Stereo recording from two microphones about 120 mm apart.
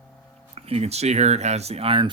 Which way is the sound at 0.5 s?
55° right (ahead or behind).